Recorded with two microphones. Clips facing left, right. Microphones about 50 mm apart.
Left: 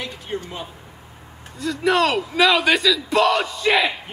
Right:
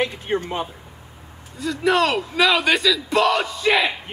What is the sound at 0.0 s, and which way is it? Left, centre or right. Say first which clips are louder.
Speech: right 7 dB; right.